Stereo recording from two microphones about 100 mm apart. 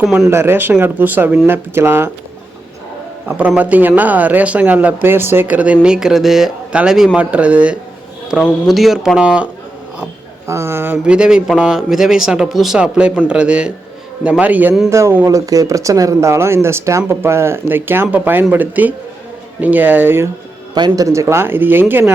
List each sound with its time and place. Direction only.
0.0 s speech: centre (ahead or behind)
0.3 s speech: 25° right (ahead or behind)
3.2 s speech: 15° right (ahead or behind)
8.6 s speech: centre (ahead or behind)
10.4 s speech: 25° right (ahead or behind)
11.0 s speech: 10° right (ahead or behind)
14.8 s speech: 30° right (ahead or behind)
20.7 s speech: 40° right (ahead or behind); by 22.1 s 20° right (ahead or behind)